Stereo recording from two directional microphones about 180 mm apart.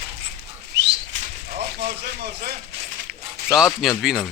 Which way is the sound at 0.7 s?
70° right (ahead or behind).